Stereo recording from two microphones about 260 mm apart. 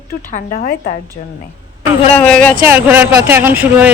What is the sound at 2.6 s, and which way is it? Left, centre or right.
Speech, centre.